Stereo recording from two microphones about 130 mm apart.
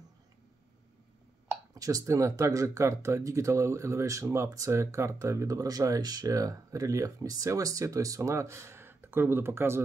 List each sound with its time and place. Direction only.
1.5 s speech: 25° right (ahead or behind)